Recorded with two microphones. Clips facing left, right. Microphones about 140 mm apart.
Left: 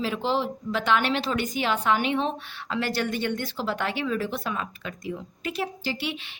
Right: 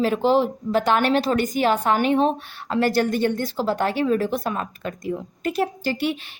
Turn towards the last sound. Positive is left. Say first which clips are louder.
# right 7 dB
turn(degrees=-45)  # may be behind; listen again after turning